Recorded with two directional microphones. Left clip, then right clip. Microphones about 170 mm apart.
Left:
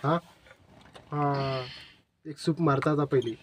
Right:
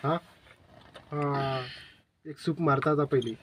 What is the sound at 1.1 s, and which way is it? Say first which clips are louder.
Speech: left 1 dB; 10° left (ahead or behind).